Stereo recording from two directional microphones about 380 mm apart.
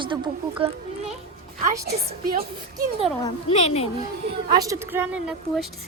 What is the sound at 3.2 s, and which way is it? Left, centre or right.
Speech, centre.